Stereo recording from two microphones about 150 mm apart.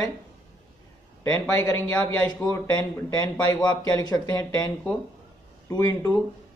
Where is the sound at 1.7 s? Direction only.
20° left (ahead or behind).